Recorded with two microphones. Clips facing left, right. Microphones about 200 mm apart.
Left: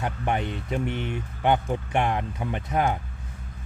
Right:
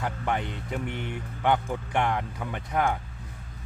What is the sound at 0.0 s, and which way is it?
A man's voice, 20° left (ahead or behind).